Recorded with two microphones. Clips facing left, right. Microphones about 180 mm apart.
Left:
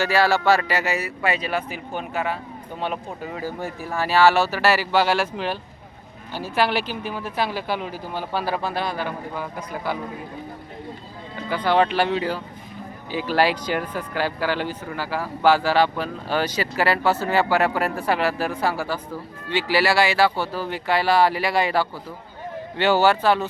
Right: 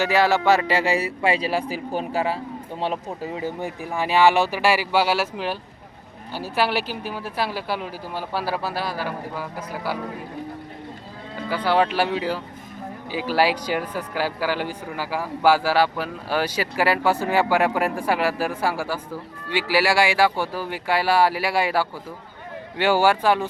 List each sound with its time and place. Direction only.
0.0 s a man's voice: 20° right (ahead or behind)
6.6 s speech: 5° right (ahead or behind)
11.4 s speech: 5° right (ahead or behind)